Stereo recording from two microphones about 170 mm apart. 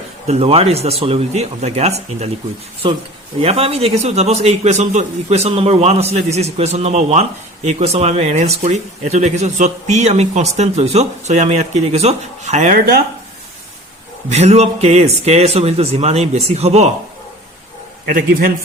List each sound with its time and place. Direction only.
0.3 s a man's voice: 35° right (ahead or behind)
14.3 s a man's voice: 40° right (ahead or behind)
18.1 s a man's voice: 55° right (ahead or behind)